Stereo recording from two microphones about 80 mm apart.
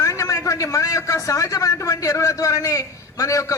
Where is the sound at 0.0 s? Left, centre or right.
Left.